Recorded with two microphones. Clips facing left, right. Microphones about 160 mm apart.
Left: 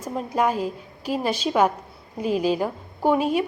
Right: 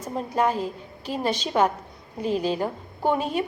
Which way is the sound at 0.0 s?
10° left (ahead or behind).